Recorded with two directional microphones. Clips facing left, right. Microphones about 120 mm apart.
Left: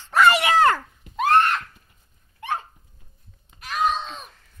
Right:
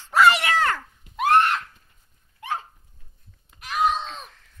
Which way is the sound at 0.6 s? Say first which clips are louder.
Left 6 dB; 45° left (ahead or behind).